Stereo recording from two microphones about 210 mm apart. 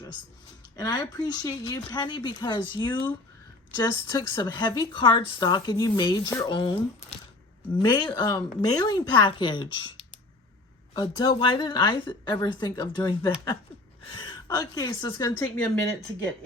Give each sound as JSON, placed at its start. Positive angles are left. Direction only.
{"t": 0.8, "sound": "speech", "side_deg": 20}